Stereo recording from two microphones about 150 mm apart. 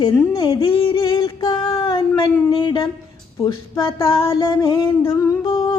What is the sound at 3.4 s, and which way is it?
Humming, 30° left (ahead or behind).